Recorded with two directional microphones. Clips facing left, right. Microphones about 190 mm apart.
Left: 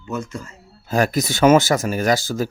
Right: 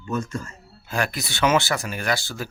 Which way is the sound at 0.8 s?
40° left (ahead or behind).